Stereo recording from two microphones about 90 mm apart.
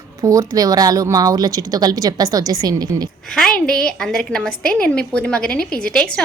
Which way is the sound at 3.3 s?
10° left (ahead or behind).